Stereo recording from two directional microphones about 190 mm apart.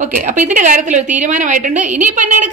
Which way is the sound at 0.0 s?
40° right (ahead or behind).